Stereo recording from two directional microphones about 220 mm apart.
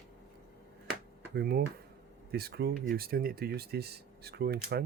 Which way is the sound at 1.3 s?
45° right (ahead or behind).